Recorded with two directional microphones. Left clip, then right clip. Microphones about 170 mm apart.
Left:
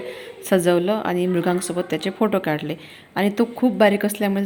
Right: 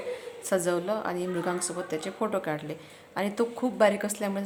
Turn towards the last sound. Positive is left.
turn(degrees=10)  # may be behind; listen again after turning